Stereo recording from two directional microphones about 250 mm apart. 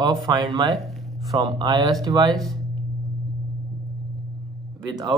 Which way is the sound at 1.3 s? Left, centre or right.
Centre.